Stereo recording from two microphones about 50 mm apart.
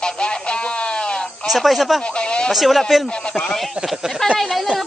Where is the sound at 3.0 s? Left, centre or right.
Centre.